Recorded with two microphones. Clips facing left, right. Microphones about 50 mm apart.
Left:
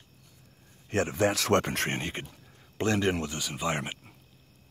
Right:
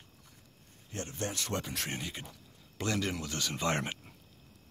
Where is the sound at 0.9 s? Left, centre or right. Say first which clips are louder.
Left 12 dB; left.